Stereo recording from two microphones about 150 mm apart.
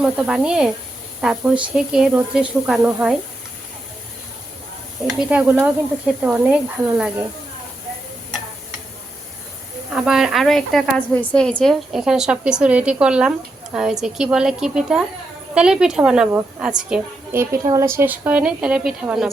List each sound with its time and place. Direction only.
0.0 s a woman's voice: 5° right (ahead or behind)
5.0 s a woman's voice: 5° right (ahead or behind)
9.9 s a woman's voice: 5° right (ahead or behind)
17.3 s a woman's voice: 15° right (ahead or behind)